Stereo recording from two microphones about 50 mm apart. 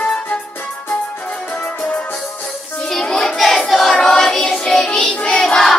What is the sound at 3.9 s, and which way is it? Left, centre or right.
Music, centre.